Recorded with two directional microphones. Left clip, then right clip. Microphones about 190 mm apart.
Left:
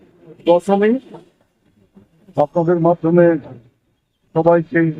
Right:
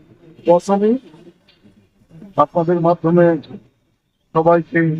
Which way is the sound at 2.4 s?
5° left (ahead or behind).